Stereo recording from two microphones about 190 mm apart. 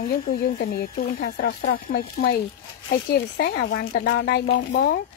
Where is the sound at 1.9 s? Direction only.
55° left (ahead or behind).